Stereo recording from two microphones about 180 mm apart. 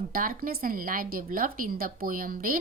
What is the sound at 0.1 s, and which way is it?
A woman's voice, 50° right (ahead or behind).